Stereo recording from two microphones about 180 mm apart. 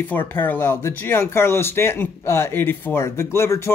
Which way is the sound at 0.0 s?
10° left (ahead or behind).